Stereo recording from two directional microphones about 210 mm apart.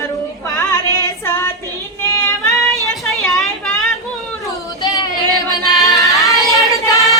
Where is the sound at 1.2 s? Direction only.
15° left (ahead or behind).